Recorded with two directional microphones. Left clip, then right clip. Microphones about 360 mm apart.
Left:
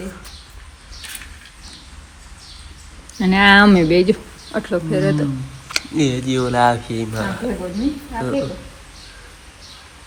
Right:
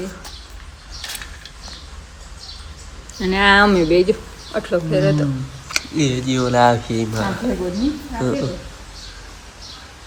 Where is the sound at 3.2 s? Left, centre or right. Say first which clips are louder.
Left 2 dB; left.